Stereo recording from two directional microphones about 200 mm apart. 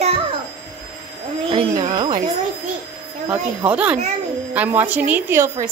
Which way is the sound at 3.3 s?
5° right (ahead or behind).